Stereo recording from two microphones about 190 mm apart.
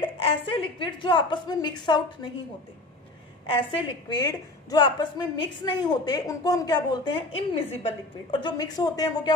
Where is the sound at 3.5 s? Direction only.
25° left (ahead or behind).